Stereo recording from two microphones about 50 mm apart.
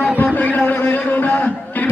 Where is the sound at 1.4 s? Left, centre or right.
Left.